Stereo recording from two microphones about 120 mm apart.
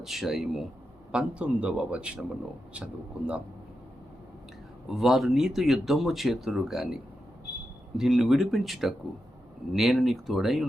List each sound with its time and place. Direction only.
0.0 s speech: centre (ahead or behind)
4.9 s speech: centre (ahead or behind)